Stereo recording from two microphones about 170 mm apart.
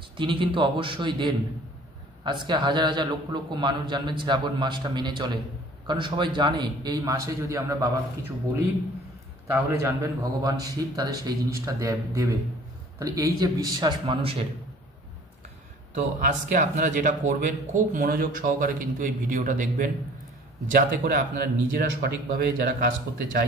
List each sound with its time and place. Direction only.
0.2 s a man's voice: 30° right (ahead or behind)
9.7 s a man's voice: 15° right (ahead or behind); by 14.4 s 35° right (ahead or behind)
15.9 s speech: 50° right (ahead or behind)
20.7 s speech: 70° right (ahead or behind)